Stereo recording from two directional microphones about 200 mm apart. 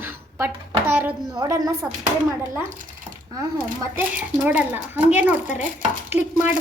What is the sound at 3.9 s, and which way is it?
A woman's voice, 10° right (ahead or behind).